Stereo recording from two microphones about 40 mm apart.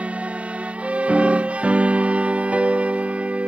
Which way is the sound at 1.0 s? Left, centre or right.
Right.